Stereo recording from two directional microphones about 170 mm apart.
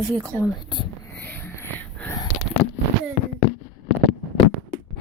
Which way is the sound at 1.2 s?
10° left (ahead or behind).